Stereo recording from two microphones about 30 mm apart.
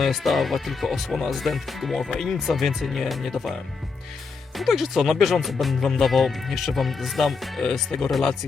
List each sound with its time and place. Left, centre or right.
0.0 s speech: centre
4.5 s speech: centre
7.6 s speech: centre